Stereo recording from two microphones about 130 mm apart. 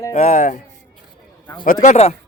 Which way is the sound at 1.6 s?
80° left.